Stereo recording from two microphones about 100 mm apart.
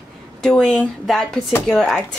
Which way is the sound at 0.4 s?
5° left (ahead or behind).